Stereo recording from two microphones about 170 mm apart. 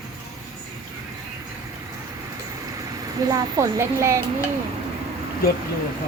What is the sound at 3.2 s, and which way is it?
Speech, 20° right (ahead or behind).